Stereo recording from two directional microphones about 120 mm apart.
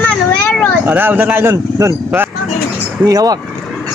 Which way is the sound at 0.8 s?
15° right (ahead or behind).